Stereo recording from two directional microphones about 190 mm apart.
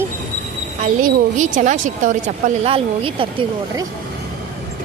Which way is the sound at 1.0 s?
40° right (ahead or behind).